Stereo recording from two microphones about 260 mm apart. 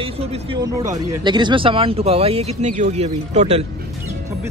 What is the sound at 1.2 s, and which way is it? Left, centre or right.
Speech, centre.